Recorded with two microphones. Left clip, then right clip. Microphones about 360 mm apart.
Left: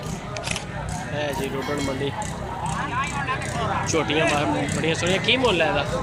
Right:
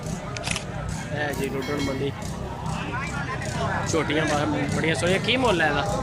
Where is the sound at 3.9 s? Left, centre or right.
Centre.